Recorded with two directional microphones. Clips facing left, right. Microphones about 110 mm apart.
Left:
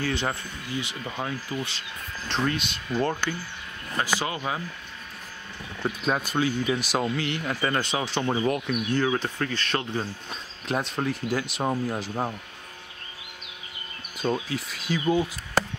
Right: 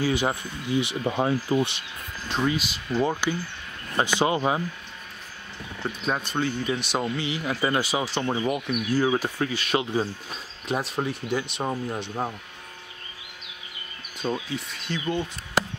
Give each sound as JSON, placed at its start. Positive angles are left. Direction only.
{"t": 0.0, "sound": "speech", "side_deg": -10}
{"t": 2.2, "sound": "speech", "side_deg": -5}
{"t": 4.0, "sound": "speech", "side_deg": -25}
{"t": 5.8, "sound": "speech", "side_deg": 5}
{"t": 14.1, "sound": "speech", "side_deg": 0}